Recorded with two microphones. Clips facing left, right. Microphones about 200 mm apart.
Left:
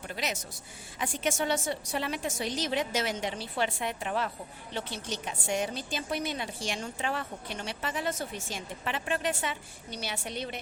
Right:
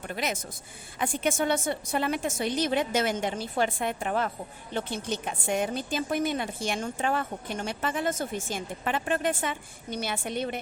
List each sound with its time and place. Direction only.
0.1 s a woman's voice: 55° right (ahead or behind)